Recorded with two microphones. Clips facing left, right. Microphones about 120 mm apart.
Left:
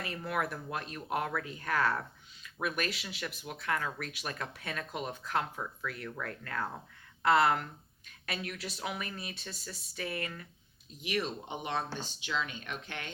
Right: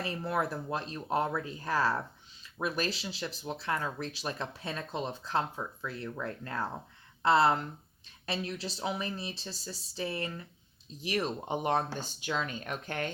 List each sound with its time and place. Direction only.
0.0 s speech: 30° right (ahead or behind)
11.0 s speech: 40° right (ahead or behind)